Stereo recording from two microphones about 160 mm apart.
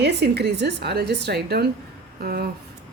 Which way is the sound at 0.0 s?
90° right.